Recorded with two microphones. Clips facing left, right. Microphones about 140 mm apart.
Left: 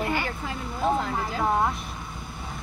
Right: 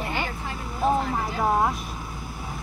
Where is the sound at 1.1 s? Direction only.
5° right (ahead or behind).